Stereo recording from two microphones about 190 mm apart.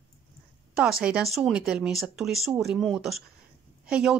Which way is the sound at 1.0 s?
5° right (ahead or behind).